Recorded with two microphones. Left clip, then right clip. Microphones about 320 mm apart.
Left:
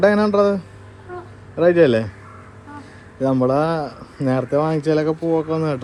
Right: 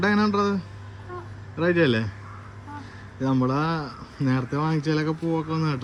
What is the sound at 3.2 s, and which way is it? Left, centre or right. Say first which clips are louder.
Speech: left 7 dB; centre.